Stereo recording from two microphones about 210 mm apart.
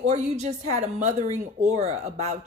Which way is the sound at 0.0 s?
30° right (ahead or behind).